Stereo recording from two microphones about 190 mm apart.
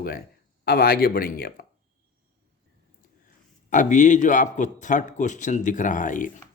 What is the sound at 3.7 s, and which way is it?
A man's voice, 40° left (ahead or behind).